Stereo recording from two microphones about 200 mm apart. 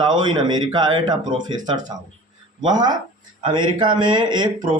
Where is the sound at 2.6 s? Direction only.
20° right (ahead or behind).